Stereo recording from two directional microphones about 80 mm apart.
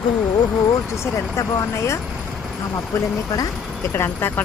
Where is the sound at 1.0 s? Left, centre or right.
Left.